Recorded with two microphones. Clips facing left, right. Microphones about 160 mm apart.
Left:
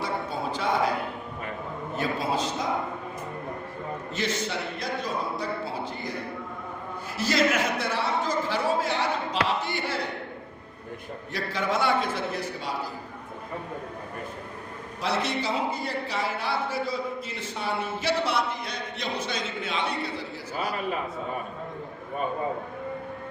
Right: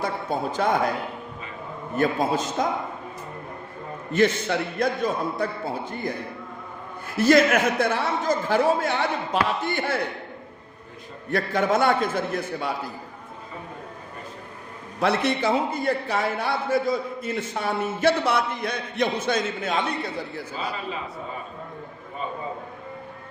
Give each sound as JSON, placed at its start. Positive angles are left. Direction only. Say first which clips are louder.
{"t": 0.0, "sound": "speech", "louder": "right 3 dB", "side_deg": -50}
{"t": 2.0, "sound": "a man's voice", "louder": "right 5 dB", "side_deg": -50}
{"t": 4.1, "sound": "a man's voice", "louder": "right 10 dB", "side_deg": -55}
{"t": 7.2, "sound": "a man's voice", "louder": "right 7 dB", "side_deg": -55}
{"t": 11.3, "sound": "a man's voice", "louder": "right 7 dB", "side_deg": -50}
{"t": 15.0, "sound": "a man's voice", "louder": "right 6 dB", "side_deg": -55}